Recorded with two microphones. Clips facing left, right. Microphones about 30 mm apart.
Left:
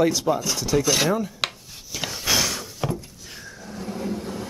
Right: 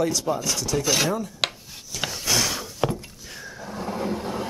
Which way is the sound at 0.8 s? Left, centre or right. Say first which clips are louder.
Right 1 dB; centre.